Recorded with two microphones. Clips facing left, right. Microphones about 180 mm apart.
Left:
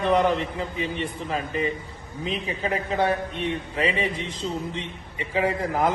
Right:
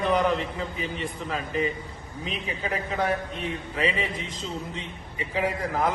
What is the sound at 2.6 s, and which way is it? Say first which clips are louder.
A man's voice: left 3 dB; 25° left (ahead or behind).